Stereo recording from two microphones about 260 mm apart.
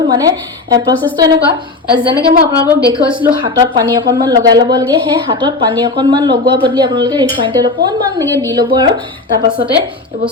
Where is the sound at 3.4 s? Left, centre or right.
Centre.